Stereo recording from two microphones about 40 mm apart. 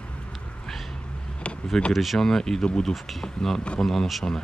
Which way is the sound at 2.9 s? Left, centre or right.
Centre.